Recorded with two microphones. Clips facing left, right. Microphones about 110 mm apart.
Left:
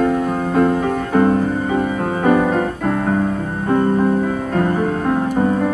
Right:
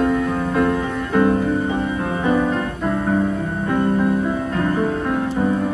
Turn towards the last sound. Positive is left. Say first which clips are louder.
# left 2 dB
turn(degrees=40)  # may be behind; listen again after turning